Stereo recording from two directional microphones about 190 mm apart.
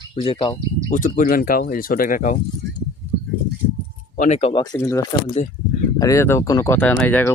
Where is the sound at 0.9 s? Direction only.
45° left (ahead or behind).